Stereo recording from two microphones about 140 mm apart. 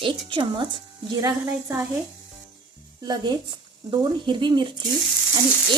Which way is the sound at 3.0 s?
30° right (ahead or behind).